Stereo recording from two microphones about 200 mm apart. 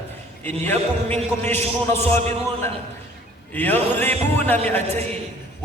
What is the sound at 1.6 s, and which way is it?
Speech, 30° right (ahead or behind).